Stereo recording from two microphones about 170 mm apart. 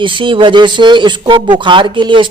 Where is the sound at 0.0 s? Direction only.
30° right (ahead or behind).